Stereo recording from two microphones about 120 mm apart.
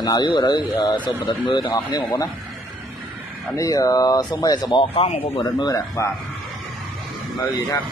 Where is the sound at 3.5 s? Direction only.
30° left (ahead or behind); by 5.3 s 55° left (ahead or behind).